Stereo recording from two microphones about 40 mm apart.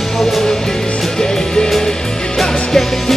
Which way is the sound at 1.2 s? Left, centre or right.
Centre.